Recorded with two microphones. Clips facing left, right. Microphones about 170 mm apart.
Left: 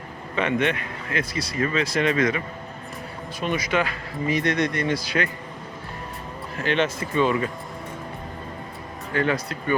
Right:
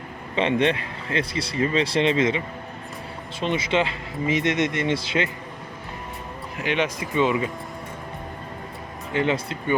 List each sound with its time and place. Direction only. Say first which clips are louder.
0.3 s speech: right 2 dB; 30° right (ahead or behind)
3.4 s speech: right 1 dB; 25° right (ahead or behind)
6.6 s speech: left 1 dB; 15° right (ahead or behind)
9.1 s speech: right 1 dB; 20° right (ahead or behind)